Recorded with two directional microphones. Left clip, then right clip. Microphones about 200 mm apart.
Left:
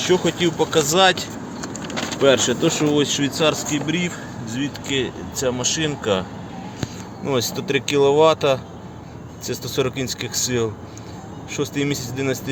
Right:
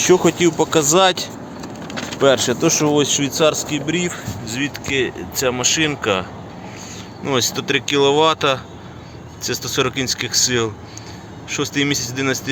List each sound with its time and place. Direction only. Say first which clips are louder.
0.0 s speech: right 5 dB; 35° right (ahead or behind); by 4.1 s 15° right (ahead or behind)
4.5 s speech: right 3 dB; 5° right (ahead or behind)
7.3 s speech: right 3 dB; centre (ahead or behind)